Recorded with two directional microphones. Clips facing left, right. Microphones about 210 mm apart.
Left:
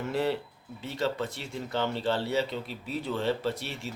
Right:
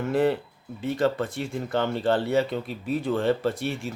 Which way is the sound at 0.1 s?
50° right (ahead or behind).